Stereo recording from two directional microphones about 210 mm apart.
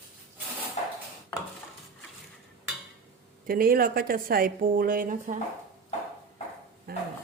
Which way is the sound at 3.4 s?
45° right (ahead or behind).